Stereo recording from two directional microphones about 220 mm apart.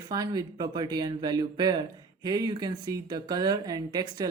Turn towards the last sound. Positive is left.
turn(degrees=-20)  # may be behind; listen again after turning